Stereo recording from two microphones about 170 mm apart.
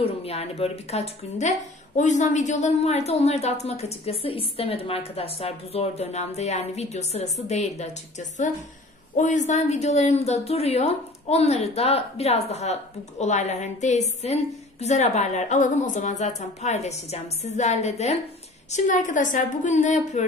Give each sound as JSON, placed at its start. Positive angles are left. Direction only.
{"t": 0.0, "sound": "a woman's voice", "side_deg": 35}